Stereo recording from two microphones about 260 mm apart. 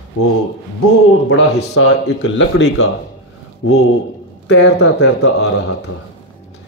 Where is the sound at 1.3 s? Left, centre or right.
Left.